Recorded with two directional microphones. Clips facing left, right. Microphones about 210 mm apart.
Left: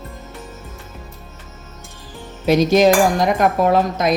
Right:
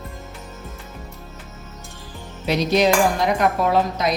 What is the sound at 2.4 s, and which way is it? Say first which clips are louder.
Cutlery: left 5 dB; 45° left (ahead or behind).